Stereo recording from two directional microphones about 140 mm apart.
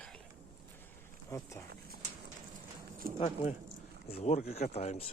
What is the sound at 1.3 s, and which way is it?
Speech, 20° left (ahead or behind).